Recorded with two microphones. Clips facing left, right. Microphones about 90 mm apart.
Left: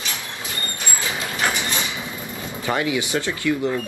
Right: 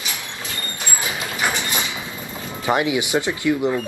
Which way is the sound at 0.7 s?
15° right (ahead or behind).